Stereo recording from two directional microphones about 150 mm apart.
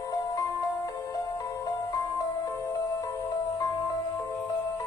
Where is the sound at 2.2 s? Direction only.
25° left (ahead or behind).